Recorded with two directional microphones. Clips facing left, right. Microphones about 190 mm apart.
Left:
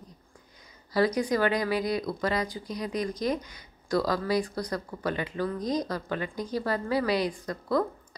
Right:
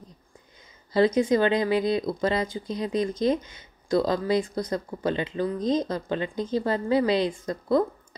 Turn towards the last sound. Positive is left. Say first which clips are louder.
# right 4 dB
turn(degrees=-25)  # may be behind; listen again after turning